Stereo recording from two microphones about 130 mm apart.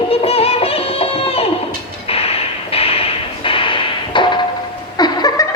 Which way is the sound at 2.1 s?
50° left (ahead or behind).